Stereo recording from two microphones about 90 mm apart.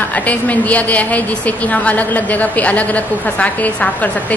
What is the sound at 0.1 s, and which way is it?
A woman's voice, 15° left (ahead or behind).